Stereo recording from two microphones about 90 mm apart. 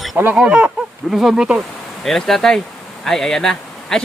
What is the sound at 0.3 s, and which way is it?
Speech, 10° right (ahead or behind).